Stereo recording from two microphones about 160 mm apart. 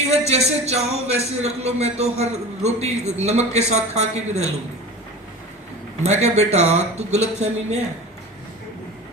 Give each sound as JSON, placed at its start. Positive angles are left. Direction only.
{"t": 0.1, "sound": "speech", "side_deg": -40}
{"t": 6.0, "sound": "speech", "side_deg": -45}